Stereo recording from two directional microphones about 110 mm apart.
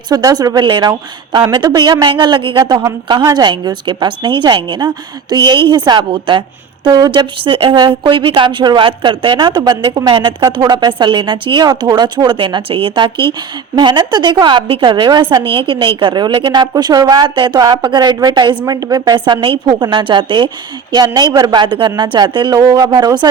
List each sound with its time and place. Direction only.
0.1 s a woman's voice: 35° right (ahead or behind)